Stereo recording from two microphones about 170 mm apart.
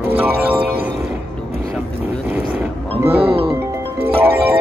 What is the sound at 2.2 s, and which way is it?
Roaring cats, 10° right (ahead or behind).